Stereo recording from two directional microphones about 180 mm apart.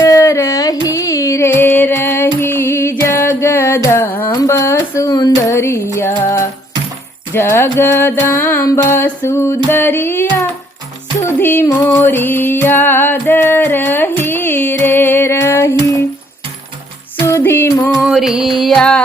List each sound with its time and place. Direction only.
0.0 s music: 15° left (ahead or behind)
4.3 s a sound: 20° left (ahead or behind)
7.3 s music: 15° left (ahead or behind)
17.2 s music: 15° left (ahead or behind)
18.0 s music: centre (ahead or behind)